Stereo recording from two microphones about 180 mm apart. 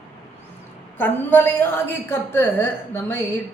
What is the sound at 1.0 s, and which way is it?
A woman's voice, 10° left (ahead or behind).